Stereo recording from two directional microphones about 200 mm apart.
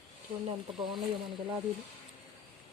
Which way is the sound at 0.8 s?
25° right (ahead or behind).